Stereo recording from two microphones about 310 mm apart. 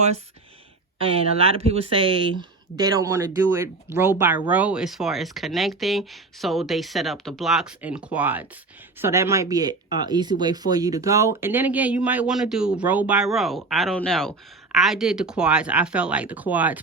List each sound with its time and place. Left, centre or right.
0.9 s speech: centre